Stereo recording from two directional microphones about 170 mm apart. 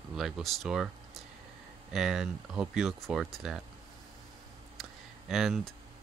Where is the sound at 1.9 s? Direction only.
Centre (ahead or behind).